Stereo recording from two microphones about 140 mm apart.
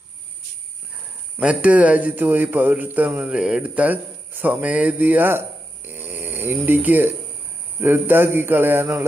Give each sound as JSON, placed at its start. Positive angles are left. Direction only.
{"t": 1.4, "sound": "a man's voice", "side_deg": -10}